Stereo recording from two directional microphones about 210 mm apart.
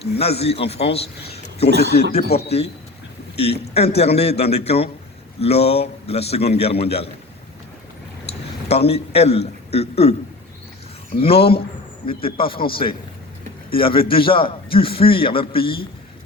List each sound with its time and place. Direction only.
0.2 s a man's voice: 30° left (ahead or behind)
1.3 s a sound: 30° left (ahead or behind)
1.7 s speech: 55° right (ahead or behind)
2.3 s a man's voice: 30° left (ahead or behind)
8.6 s a man's voice: 30° left (ahead or behind)
11.2 s a man's voice: 25° left (ahead or behind)